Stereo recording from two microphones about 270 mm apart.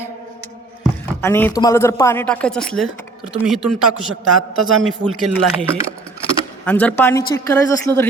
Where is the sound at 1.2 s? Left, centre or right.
Centre.